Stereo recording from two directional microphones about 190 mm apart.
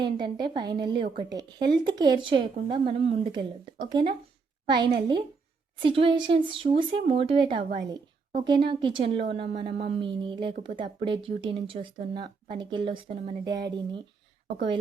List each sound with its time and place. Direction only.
0.0 s a woman's voice: 25° right (ahead or behind)